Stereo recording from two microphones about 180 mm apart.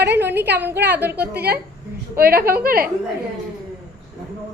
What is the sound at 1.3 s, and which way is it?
Speech, 60° right (ahead or behind).